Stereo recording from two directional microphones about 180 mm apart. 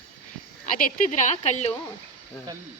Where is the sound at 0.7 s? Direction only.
45° left (ahead or behind).